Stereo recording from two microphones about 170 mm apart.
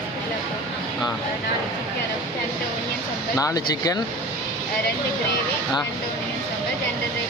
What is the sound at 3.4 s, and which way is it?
Speech, 20° left (ahead or behind).